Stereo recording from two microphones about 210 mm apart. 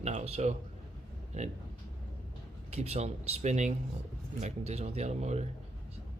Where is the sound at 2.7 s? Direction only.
30° right (ahead or behind).